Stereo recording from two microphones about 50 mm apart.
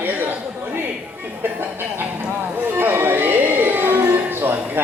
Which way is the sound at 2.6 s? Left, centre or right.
Right.